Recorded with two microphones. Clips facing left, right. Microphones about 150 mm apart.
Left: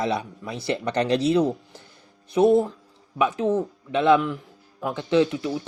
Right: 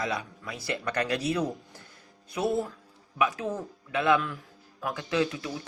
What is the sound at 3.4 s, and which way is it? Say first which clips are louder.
Speech: left 10 dB; 25° left (ahead or behind).